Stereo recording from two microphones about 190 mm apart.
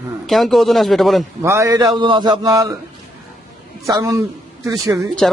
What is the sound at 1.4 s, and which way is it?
A man's voice, 15° right (ahead or behind).